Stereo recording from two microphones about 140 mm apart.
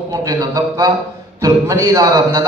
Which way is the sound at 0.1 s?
25° right (ahead or behind).